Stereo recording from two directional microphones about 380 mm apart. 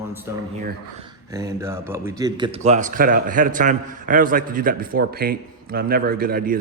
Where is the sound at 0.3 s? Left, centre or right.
Centre.